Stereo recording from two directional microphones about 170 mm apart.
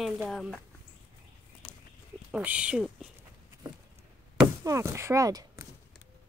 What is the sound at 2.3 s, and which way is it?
Speech, 5° right (ahead or behind).